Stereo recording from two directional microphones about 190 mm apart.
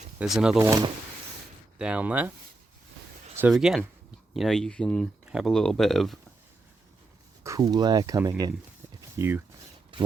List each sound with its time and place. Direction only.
0.2 s speech: 5° right (ahead or behind)
0.6 s speech: 15° right (ahead or behind)
1.8 s speech: 5° right (ahead or behind)
3.3 s speech: 5° right (ahead or behind)
7.4 s speech: 20° right (ahead or behind)
9.0 s a sound: 15° right (ahead or behind)